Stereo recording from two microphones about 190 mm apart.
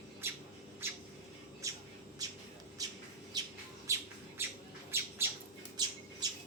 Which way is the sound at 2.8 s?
20° right (ahead or behind).